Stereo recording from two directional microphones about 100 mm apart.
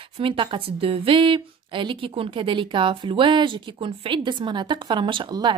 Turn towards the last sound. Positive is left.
turn(degrees=-50)  # may be behind; listen again after turning